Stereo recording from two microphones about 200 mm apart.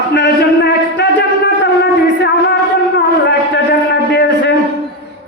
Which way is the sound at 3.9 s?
55° left (ahead or behind).